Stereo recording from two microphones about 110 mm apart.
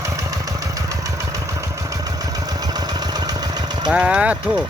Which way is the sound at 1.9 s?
35° right (ahead or behind).